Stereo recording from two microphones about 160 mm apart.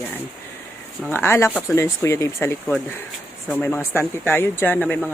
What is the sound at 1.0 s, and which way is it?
Speech, 15° left (ahead or behind).